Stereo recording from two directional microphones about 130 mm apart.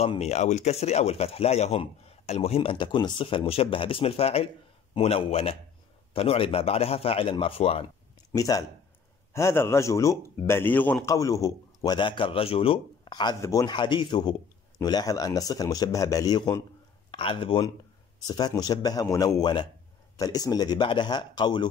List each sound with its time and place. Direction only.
0.2 s speech: 60° left (ahead or behind)
8.4 s a man's voice: 30° left (ahead or behind)
17.1 s a man's voice: 40° left (ahead or behind)